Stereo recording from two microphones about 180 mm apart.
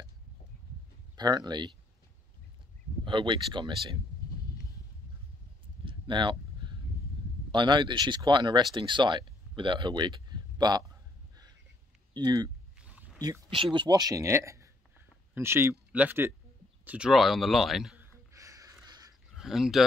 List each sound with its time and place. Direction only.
1.1 s speech: 25° right (ahead or behind)
3.1 s speech: 25° right (ahead or behind)
5.9 s a sound: 25° right (ahead or behind)
7.5 s speech: 25° right (ahead or behind)
12.1 s speech: 25° right (ahead or behind)
12.8 s a sound: 10° right (ahead or behind)
13.7 s speech: 20° right (ahead or behind)
16.8 s a sound: 5° right (ahead or behind)
19.3 s speech: centre (ahead or behind)